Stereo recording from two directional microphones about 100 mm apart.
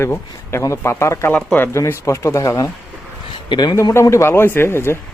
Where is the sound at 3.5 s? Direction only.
45° left (ahead or behind).